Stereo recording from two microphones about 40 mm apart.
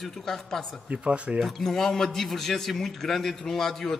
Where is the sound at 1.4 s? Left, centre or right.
Centre.